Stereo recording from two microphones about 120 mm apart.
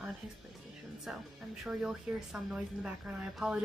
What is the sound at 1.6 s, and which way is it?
A woman's voice, 5° right (ahead or behind).